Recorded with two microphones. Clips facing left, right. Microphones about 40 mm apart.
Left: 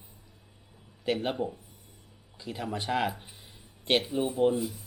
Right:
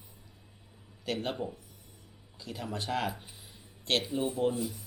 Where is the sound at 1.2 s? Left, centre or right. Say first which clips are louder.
Left 4 dB; centre.